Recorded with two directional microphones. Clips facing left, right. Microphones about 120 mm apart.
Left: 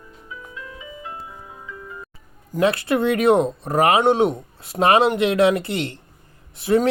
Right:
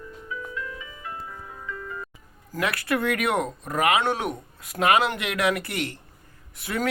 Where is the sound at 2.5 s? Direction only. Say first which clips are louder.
Left 7 dB; 25° left (ahead or behind).